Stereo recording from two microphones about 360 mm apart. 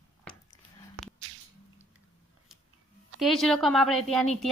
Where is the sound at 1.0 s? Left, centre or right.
Right.